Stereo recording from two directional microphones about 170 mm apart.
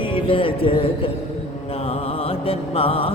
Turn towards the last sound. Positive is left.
turn(degrees=35)  # may be behind; listen again after turning